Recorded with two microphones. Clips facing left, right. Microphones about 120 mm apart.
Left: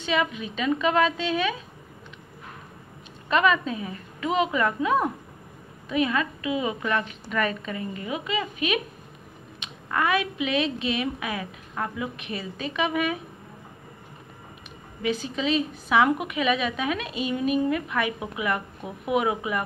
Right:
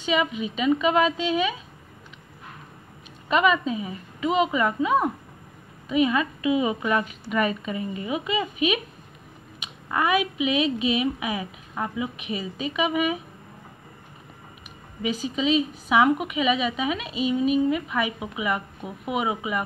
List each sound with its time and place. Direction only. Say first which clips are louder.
0.0 s a woman's voice: right 2 dB; 5° right (ahead or behind)
3.3 s a woman's voice: right 1 dB; 5° right (ahead or behind)
15.0 s a woman's voice: right 1 dB; 5° right (ahead or behind)